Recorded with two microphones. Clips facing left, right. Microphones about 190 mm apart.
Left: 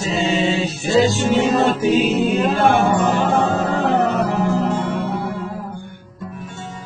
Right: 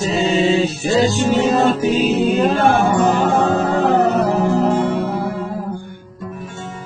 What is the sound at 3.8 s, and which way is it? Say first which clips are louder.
Music: right 3 dB; 40° right (ahead or behind).